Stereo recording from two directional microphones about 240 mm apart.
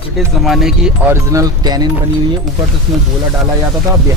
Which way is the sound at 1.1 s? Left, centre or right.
Centre.